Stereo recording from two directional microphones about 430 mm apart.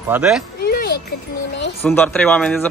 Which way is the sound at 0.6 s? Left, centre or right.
Left.